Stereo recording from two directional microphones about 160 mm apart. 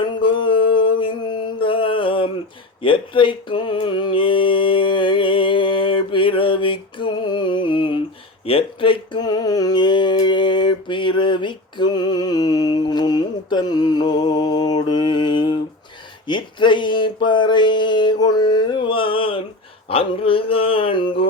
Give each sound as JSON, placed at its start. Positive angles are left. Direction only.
{"t": 0.0, "sound": "mantra", "side_deg": 30}
{"t": 8.4, "sound": "a sound", "side_deg": 35}
{"t": 19.9, "sound": "speech", "side_deg": 35}